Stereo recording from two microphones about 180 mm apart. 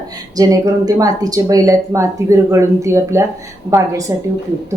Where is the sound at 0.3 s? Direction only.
20° right (ahead or behind).